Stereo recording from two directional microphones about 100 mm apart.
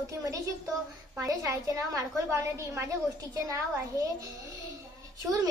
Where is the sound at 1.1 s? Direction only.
35° right (ahead or behind).